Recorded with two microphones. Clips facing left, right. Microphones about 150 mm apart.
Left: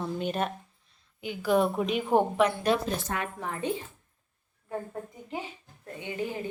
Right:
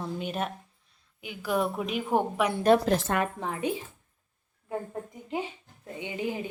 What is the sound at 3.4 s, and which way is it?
Speech, 15° right (ahead or behind).